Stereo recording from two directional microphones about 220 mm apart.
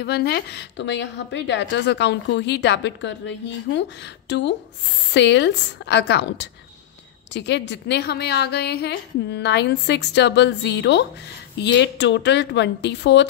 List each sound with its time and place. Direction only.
0.0 s a woman's voice: 50° left (ahead or behind)